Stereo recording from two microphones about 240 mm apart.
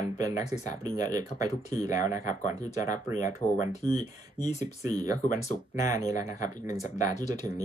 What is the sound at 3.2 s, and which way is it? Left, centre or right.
Speech, centre.